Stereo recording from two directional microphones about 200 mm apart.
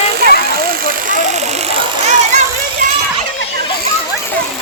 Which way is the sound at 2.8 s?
40° right (ahead or behind).